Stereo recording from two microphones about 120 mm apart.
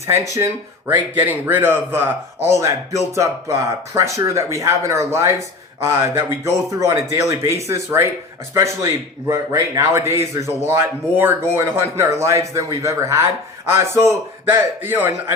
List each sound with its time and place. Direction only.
0.0 s a man's voice: 25° right (ahead or behind)